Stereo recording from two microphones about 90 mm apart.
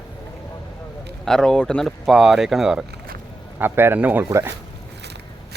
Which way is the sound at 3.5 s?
25° right (ahead or behind).